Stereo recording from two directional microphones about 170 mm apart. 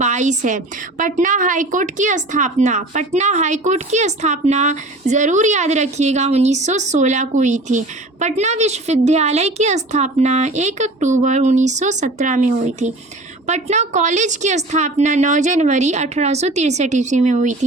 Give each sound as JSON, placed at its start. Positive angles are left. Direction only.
{"t": 0.0, "sound": "a woman's voice", "side_deg": -45}